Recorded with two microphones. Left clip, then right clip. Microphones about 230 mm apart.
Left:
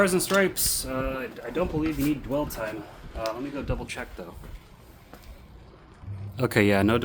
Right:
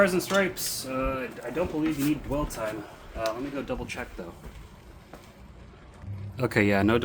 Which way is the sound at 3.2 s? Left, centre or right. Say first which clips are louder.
Right 1 dB; centre.